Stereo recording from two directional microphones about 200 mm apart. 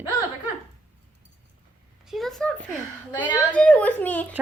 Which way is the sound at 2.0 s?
Centre (ahead or behind).